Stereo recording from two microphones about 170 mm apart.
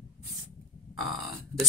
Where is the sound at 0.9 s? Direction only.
Centre (ahead or behind).